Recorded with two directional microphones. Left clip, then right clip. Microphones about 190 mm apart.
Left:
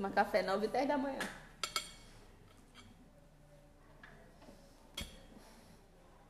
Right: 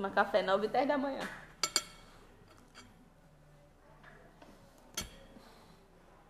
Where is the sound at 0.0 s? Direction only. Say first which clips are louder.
Right 3 dB; 25° left (ahead or behind).